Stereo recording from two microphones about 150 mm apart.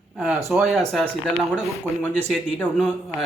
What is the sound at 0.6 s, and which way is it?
Speech, centre (ahead or behind).